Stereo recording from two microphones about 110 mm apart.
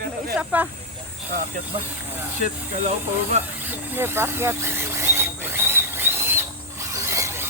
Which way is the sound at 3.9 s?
20° right (ahead or behind).